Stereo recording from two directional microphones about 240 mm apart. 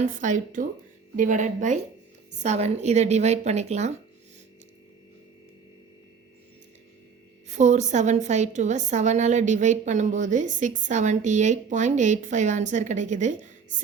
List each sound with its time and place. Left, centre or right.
0.0 s a woman's voice: right
7.4 s a woman's voice: right